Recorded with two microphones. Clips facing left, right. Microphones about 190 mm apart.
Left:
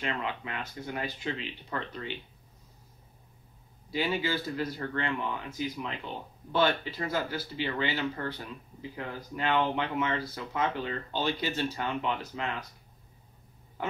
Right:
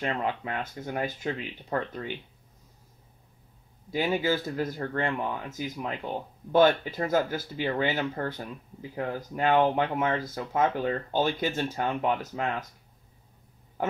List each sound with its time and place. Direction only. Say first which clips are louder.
0.0 s speech: right 4 dB; 45° right (ahead or behind)
3.9 s speech: right 4 dB; 45° right (ahead or behind)